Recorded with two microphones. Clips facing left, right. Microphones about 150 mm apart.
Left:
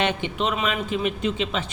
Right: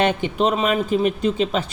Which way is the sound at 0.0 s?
40° right (ahead or behind).